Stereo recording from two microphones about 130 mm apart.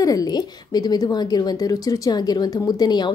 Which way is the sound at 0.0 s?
30° left (ahead or behind).